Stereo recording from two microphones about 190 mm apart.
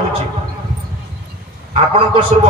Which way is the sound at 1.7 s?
30° right (ahead or behind).